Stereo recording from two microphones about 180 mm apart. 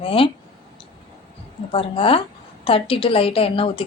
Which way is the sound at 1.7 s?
30° left (ahead or behind).